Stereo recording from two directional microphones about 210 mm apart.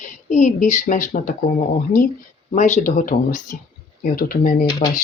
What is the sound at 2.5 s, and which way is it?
Speech, 35° left (ahead or behind).